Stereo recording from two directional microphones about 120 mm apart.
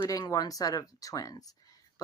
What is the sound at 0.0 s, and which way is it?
Speech, 30° left (ahead or behind).